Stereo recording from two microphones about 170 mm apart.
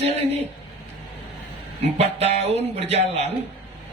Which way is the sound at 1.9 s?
40° right (ahead or behind).